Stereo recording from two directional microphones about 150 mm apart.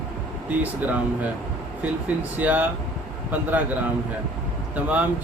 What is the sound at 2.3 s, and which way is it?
Speech, 10° right (ahead or behind).